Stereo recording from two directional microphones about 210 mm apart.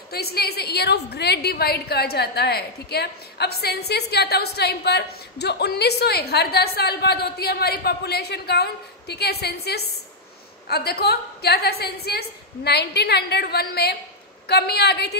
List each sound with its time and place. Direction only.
0.1 s a woman's voice: 50° left (ahead or behind)